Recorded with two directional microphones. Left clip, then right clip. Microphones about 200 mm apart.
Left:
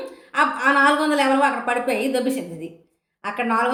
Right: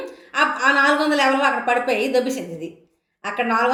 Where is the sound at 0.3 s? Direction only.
10° left (ahead or behind).